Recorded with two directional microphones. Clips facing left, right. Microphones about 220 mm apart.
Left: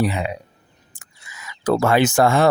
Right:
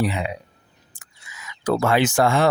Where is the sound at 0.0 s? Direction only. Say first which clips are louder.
Left 2 dB; 40° left (ahead or behind).